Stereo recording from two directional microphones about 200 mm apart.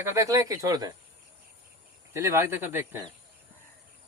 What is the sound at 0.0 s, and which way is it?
Speech, 15° right (ahead or behind).